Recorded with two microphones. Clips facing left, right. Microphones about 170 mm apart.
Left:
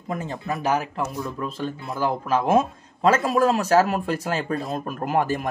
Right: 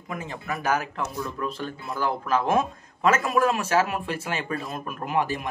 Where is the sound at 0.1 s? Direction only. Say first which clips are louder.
Left 5 dB; 35° left (ahead or behind).